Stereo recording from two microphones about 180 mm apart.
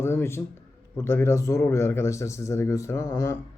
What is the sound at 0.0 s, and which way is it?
Speech, 15° left (ahead or behind).